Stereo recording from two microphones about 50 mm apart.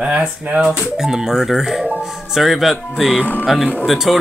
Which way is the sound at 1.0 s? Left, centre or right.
Centre.